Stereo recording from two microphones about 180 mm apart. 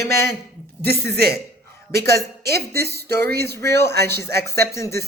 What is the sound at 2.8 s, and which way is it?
Speech, 65° right (ahead or behind).